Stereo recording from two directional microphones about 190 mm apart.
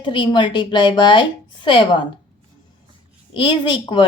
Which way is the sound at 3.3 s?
25° left (ahead or behind).